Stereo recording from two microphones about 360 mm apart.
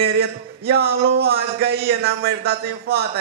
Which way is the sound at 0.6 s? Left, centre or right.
Right.